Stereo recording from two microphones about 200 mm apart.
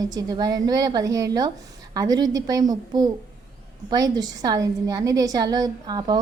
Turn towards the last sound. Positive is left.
turn(degrees=-20)  # may be behind; listen again after turning